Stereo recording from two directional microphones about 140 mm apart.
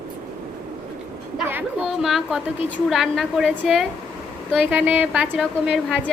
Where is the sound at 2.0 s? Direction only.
Centre (ahead or behind).